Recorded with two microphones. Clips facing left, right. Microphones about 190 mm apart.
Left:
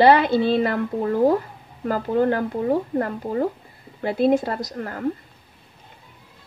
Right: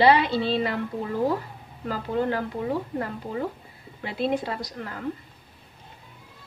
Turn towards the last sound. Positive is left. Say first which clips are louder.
# left 5 dB
turn(degrees=45)  # may be behind; listen again after turning